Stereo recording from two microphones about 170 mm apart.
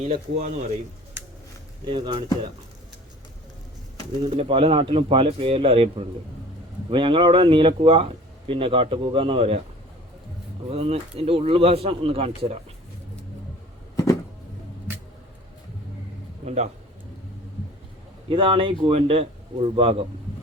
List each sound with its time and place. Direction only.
0.0 s a man's voice: 40° right (ahead or behind)
1.8 s speech: 30° right (ahead or behind)
4.2 s a man's voice: 30° right (ahead or behind)
6.9 s a man's voice: 30° right (ahead or behind)
10.7 s a man's voice: 35° right (ahead or behind)
13.9 s a sound: 20° left (ahead or behind)
18.3 s a man's voice: 30° right (ahead or behind)